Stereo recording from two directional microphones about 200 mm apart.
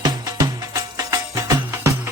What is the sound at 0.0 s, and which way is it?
Music, 20° right (ahead or behind).